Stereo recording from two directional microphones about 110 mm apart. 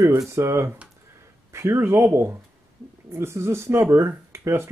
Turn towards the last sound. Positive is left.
turn(degrees=-25)  # may be behind; listen again after turning